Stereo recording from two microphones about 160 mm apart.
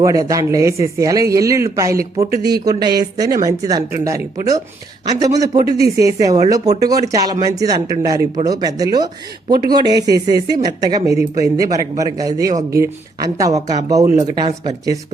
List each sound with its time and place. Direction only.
0.0 s speech: 20° right (ahead or behind)